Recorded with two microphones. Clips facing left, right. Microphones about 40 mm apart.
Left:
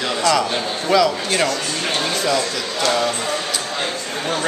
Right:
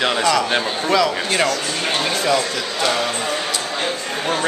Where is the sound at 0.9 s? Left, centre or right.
Centre.